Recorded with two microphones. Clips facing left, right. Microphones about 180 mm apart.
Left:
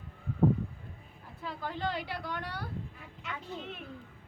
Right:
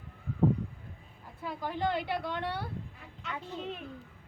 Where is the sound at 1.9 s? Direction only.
55° right (ahead or behind).